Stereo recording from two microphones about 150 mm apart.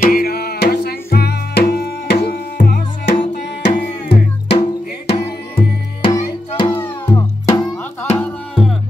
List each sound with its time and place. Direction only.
0.0 s music: 80° left; by 3.7 s 55° left (ahead or behind)
4.5 s music: 40° left (ahead or behind)
6.1 s music: 30° left (ahead or behind)
6.7 s music: 15° left (ahead or behind)
8.2 s music: centre (ahead or behind)